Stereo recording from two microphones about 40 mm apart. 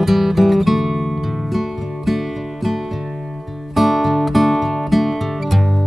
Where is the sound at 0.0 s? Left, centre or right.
Centre.